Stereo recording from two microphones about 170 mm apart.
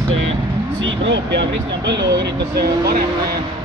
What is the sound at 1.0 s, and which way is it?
Speech, 90° right.